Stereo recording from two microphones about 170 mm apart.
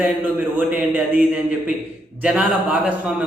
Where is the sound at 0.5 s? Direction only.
10° right (ahead or behind).